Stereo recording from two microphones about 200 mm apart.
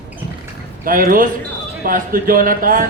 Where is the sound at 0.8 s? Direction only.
45° right (ahead or behind).